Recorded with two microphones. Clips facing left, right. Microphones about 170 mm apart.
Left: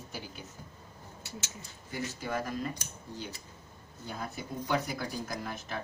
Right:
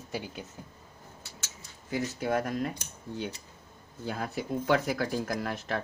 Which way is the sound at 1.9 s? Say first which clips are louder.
Right 6 dB; 65° right (ahead or behind).